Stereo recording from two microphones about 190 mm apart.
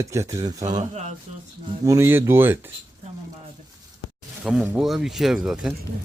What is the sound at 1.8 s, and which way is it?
Speech, 15° right (ahead or behind).